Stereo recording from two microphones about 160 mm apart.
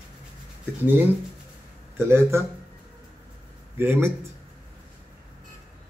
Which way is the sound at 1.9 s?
15° right (ahead or behind).